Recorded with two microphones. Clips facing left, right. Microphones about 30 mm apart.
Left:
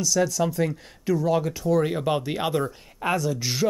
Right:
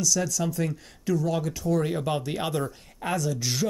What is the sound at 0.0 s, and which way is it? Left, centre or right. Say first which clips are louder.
Speech: left 4 dB; centre.